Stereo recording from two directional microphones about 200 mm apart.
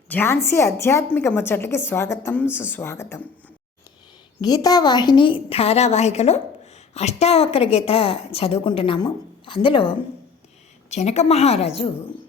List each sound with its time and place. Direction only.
0.1 s a woman's voice: 10° left (ahead or behind)
4.4 s a woman's voice: 20° left (ahead or behind)